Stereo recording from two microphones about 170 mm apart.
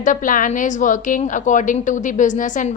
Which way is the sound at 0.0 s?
50° left (ahead or behind).